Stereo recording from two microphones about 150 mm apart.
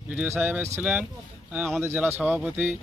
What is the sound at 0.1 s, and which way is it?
Speech, 10° right (ahead or behind).